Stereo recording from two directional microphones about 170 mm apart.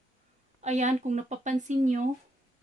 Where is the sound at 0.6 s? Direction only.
45° right (ahead or behind).